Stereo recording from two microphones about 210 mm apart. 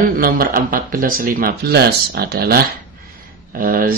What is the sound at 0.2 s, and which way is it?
Speech, 45° right (ahead or behind).